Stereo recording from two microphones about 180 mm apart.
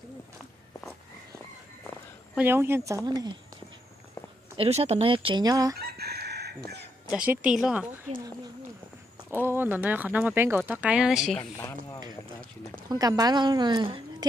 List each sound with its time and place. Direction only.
2.3 s speech: 10° right (ahead or behind)
4.6 s speech: 35° right (ahead or behind)
5.8 s chicken: 65° right (ahead or behind)
7.2 s speech: 5° right (ahead or behind)
9.5 s speech: 10° right (ahead or behind)
11.5 s a sound: 20° left (ahead or behind)
12.9 s speech: 20° right (ahead or behind)